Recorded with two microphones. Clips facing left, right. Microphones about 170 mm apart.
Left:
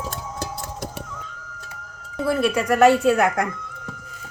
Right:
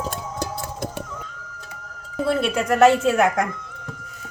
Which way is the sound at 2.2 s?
25° right (ahead or behind).